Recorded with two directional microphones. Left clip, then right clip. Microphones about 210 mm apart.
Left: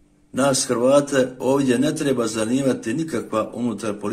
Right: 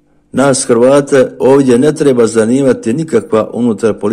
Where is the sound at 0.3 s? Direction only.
35° right (ahead or behind).